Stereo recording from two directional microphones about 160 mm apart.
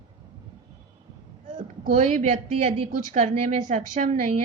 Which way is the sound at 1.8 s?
55° right (ahead or behind).